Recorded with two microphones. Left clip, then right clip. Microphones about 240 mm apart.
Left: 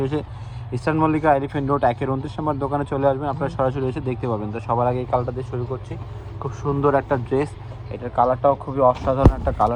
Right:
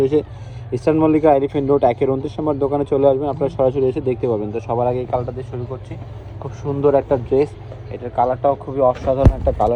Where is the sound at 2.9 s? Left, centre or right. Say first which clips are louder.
Right 6 dB; left.